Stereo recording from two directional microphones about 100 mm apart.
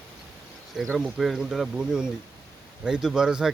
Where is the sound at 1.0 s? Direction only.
Centre (ahead or behind).